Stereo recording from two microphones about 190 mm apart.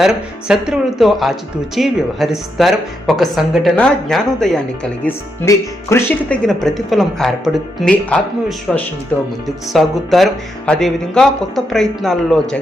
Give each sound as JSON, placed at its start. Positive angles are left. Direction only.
{"t": 0.4, "sound": "speech", "side_deg": -5}